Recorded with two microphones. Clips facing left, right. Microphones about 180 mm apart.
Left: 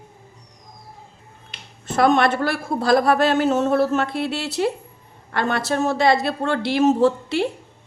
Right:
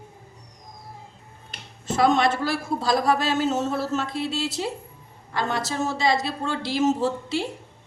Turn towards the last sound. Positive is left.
turn(degrees=60)  # may be behind; listen again after turning